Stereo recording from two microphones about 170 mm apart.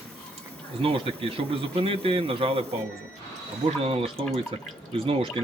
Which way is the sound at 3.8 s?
35° right (ahead or behind).